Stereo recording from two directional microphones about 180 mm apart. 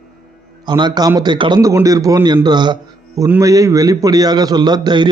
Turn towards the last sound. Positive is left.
turn(degrees=-25)  # may be behind; listen again after turning